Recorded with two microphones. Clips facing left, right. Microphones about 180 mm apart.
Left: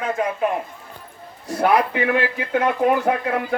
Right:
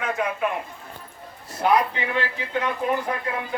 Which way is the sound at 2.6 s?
65° left (ahead or behind).